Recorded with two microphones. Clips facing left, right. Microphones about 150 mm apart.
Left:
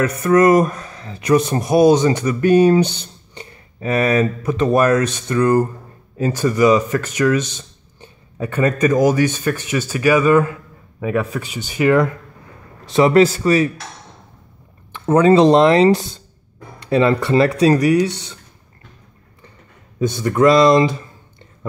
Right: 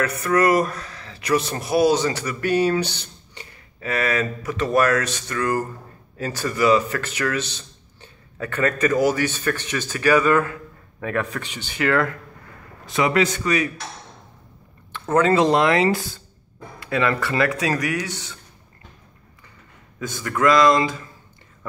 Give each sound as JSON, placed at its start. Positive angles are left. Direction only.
{"t": 0.0, "sound": "speech", "side_deg": 20}
{"t": 12.9, "sound": "a man's voice", "side_deg": 35}
{"t": 14.9, "sound": "a sound", "side_deg": 15}
{"t": 15.3, "sound": "speech", "side_deg": 25}
{"t": 20.0, "sound": "speech", "side_deg": 20}